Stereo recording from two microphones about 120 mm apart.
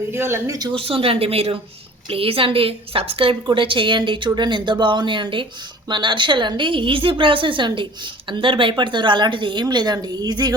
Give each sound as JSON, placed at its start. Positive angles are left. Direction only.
{"t": 0.1, "sound": "speech", "side_deg": -20}
{"t": 0.7, "sound": "a woman's voice", "side_deg": -50}